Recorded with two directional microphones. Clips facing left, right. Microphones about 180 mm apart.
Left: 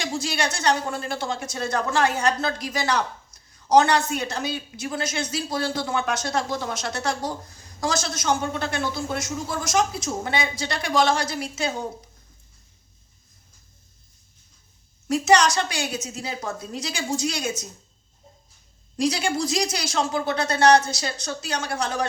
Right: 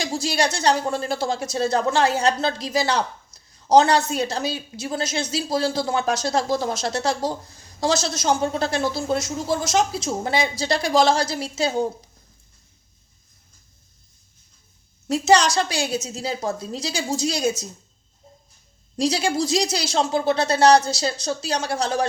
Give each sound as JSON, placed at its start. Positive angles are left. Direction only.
{"t": 0.0, "sound": "a woman's voice", "side_deg": -35}
{"t": 15.0, "sound": "a woman's voice", "side_deg": -30}
{"t": 18.9, "sound": "a woman's voice", "side_deg": -30}